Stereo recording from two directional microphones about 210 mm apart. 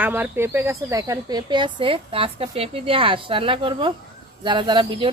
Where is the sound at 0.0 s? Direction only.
10° right (ahead or behind).